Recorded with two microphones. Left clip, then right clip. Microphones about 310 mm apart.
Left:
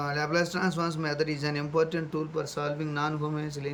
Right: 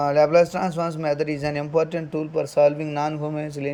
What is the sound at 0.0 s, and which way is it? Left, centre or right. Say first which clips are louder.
A man's voice: right 11 dB; centre.